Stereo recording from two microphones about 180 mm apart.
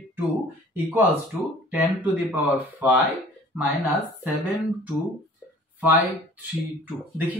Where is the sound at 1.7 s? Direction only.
10° right (ahead or behind).